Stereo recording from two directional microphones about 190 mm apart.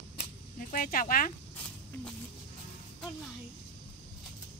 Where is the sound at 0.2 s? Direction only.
45° left (ahead or behind).